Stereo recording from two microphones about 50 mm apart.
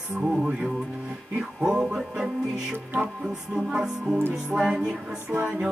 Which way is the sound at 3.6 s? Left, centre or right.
Centre.